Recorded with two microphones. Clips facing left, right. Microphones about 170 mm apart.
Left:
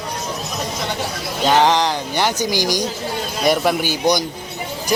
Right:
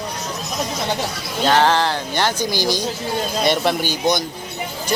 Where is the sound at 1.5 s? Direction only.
15° left (ahead or behind).